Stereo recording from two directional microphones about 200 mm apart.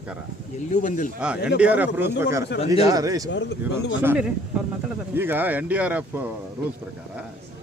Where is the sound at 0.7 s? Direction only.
40° left (ahead or behind).